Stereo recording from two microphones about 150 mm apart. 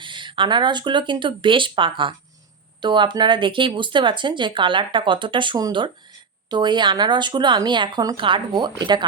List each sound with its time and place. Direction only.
0.0 s speech: 30° right (ahead or behind)